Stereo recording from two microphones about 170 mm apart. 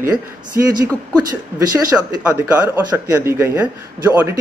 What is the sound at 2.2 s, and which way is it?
Speech, 10° right (ahead or behind).